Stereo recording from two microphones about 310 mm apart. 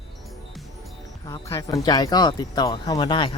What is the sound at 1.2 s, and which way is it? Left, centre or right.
Speech, centre.